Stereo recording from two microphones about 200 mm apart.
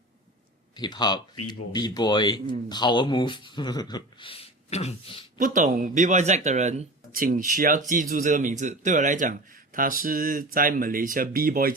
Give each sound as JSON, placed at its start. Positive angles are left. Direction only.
{"t": 0.8, "sound": "speech", "side_deg": 20}
{"t": 5.4, "sound": "speech", "side_deg": -40}